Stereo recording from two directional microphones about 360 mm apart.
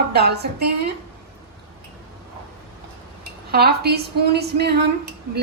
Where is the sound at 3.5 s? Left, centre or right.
Right.